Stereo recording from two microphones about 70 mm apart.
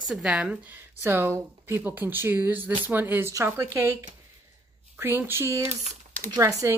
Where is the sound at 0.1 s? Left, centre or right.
Centre.